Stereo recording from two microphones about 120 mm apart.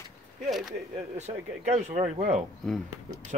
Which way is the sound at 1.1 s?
75° right (ahead or behind).